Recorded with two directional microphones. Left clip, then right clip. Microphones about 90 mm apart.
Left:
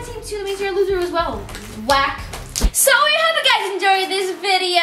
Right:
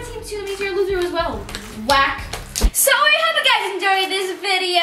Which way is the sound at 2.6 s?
20° left (ahead or behind).